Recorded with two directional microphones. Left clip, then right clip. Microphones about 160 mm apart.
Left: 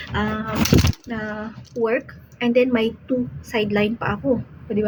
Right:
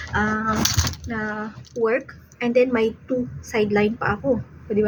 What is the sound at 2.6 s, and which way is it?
Speech, 10° left (ahead or behind).